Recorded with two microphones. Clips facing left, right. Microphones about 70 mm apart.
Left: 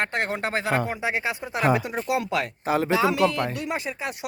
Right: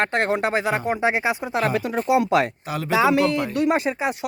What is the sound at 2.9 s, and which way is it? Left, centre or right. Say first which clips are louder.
Speech: right 6 dB; right.